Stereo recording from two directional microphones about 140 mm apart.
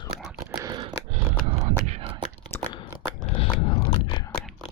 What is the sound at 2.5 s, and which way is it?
Crunch, 15° left (ahead or behind).